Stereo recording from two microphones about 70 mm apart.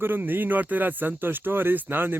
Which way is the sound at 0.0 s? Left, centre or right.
Right.